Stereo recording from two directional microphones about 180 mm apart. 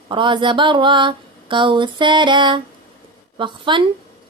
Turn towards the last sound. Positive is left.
turn(degrees=-25)  # may be behind; listen again after turning